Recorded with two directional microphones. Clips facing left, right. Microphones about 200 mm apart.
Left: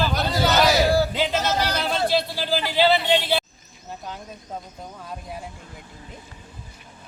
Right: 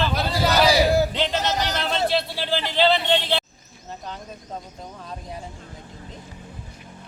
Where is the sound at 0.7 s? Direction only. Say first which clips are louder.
Right 1 dB; 20° right (ahead or behind).